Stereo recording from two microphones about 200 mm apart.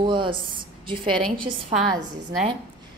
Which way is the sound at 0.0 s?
25° right (ahead or behind).